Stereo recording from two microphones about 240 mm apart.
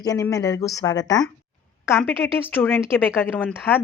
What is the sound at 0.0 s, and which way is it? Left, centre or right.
Speech, centre.